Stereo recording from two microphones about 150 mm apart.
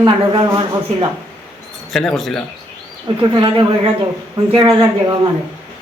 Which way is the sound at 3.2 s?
30° right (ahead or behind).